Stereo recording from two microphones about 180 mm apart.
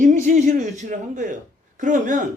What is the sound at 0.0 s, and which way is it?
Speech, 45° right (ahead or behind).